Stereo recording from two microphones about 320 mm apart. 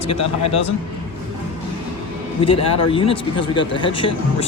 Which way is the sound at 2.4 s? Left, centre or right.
Centre.